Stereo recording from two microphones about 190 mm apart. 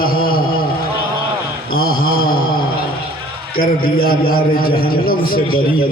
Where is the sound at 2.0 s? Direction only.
50° left (ahead or behind).